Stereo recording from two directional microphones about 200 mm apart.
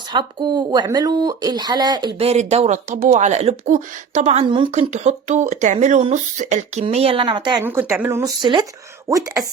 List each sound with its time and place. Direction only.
0.1 s speech: 25° right (ahead or behind)
7.6 s speech: 10° right (ahead or behind)